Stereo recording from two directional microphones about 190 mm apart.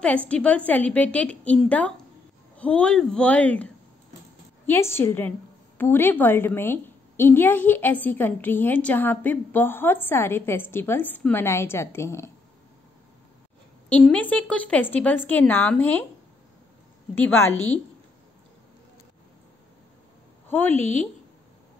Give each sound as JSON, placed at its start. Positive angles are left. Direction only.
{"t": 0.0, "sound": "a woman's voice", "side_deg": 5}
{"t": 13.8, "sound": "a woman's voice", "side_deg": 10}
{"t": 17.2, "sound": "a woman's voice", "side_deg": 10}
{"t": 20.4, "sound": "a sound", "side_deg": 10}
{"t": 20.7, "sound": "speech", "side_deg": -35}